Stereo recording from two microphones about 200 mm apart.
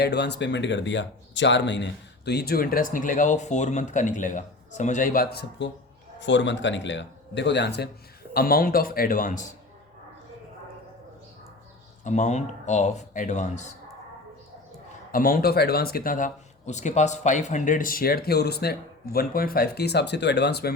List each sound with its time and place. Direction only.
0.0 s speech: 55° left (ahead or behind); by 9.6 s 40° left (ahead or behind)
12.0 s speech: 35° left (ahead or behind)
15.1 s speech: 45° left (ahead or behind)